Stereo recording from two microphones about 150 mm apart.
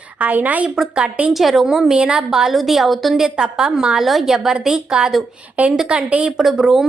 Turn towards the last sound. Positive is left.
turn(degrees=0)  # may be behind; listen again after turning